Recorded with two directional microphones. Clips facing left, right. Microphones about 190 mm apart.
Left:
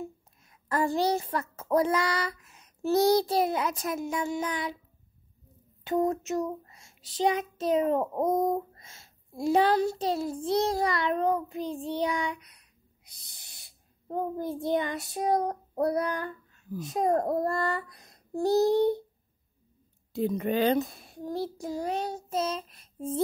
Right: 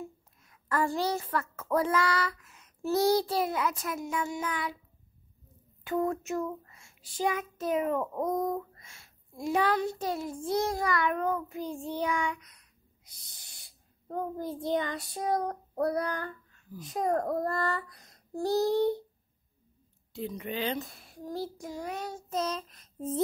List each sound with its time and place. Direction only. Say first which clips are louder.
0.5 s a child's voice: left 2 dB; 20° left (ahead or behind)
5.9 s a child's voice: left 3 dB; 20° left (ahead or behind)
6.7 s child singing: left 2 dB; 35° left (ahead or behind)
7.2 s a child's voice: left 4 dB; 20° left (ahead or behind)
8.5 s a child's voice: left 4 dB; 35° left (ahead or behind); by 12.1 s 20° left (ahead or behind)
13.1 s a child's voice: left 1 dB; 15° left (ahead or behind)
20.1 s a woman's voice: left 8 dB; 50° left (ahead or behind)
20.8 s a child's voice: left 5 dB; 20° left (ahead or behind)